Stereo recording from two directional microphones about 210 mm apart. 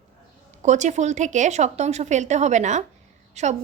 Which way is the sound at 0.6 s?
35° right (ahead or behind).